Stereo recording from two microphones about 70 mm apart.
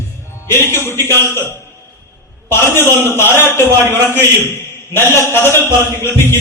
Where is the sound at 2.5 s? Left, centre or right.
Left.